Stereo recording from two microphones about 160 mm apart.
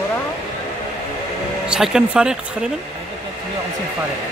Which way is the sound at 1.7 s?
5° right (ahead or behind).